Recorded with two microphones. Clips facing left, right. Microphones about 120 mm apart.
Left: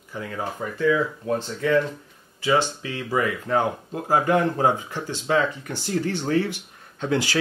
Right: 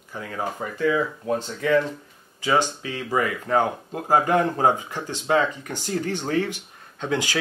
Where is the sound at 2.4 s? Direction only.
15° right (ahead or behind).